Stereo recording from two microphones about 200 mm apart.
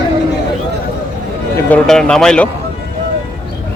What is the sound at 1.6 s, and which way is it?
Speech, 5° left (ahead or behind).